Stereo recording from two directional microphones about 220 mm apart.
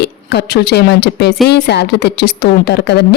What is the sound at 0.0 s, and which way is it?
A woman's voice, 50° left (ahead or behind).